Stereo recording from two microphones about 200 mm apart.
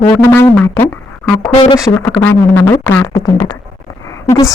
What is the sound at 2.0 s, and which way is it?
A woman's voice, 10° left (ahead or behind).